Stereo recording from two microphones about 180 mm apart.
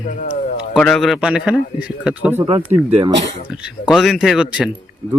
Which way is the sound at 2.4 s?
35° right (ahead or behind).